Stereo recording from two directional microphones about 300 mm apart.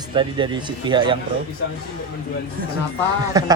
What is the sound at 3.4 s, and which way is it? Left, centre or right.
Speech, centre.